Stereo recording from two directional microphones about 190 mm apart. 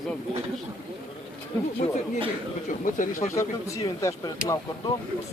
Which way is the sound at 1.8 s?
35° left (ahead or behind).